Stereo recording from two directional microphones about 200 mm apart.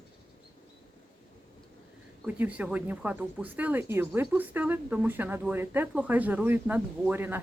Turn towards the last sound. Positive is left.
turn(degrees=-10)  # may be behind; listen again after turning